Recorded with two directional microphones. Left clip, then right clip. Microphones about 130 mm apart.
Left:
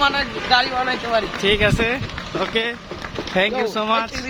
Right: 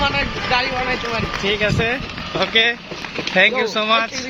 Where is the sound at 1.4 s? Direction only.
40° left (ahead or behind); by 2.0 s 25° left (ahead or behind).